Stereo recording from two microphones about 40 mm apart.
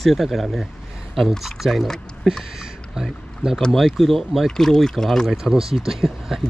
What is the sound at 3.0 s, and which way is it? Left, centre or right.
Speech, centre.